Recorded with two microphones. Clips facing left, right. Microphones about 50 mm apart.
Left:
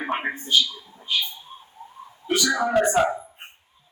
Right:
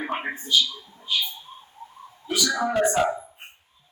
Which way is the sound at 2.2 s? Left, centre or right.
Left.